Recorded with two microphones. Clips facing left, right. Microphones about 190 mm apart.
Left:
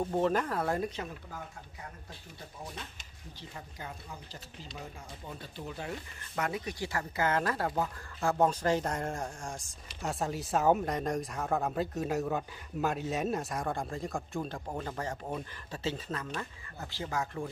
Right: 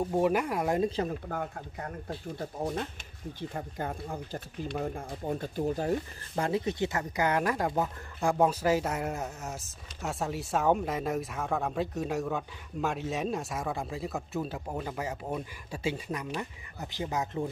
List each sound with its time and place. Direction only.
0.0 s speech: 10° right (ahead or behind)
0.8 s speech: 35° right (ahead or behind)
1.3 s speech: 60° right (ahead or behind); by 17.5 s 20° right (ahead or behind)